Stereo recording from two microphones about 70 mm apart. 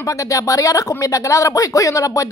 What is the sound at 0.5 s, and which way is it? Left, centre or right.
A woman's voice, left.